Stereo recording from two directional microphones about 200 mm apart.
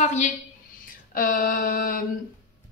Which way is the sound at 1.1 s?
45° left (ahead or behind).